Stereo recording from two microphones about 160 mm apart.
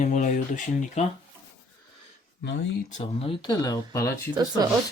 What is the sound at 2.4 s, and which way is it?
Speech, 90° left.